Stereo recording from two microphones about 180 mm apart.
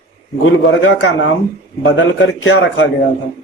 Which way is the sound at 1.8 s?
90° left.